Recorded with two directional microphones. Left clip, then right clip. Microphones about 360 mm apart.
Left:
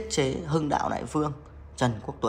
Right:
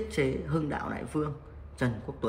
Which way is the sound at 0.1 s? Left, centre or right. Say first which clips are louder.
Left 5 dB; centre.